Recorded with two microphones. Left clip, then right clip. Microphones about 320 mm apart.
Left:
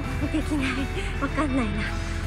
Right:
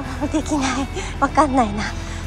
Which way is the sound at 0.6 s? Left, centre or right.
Centre.